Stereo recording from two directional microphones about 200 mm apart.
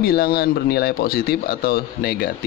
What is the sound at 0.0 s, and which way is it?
Speech, 50° left (ahead or behind).